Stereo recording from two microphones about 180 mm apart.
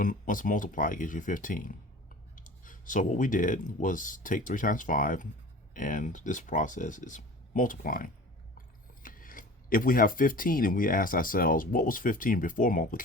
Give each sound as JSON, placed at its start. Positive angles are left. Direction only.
{"t": 0.0, "sound": "speech", "side_deg": 45}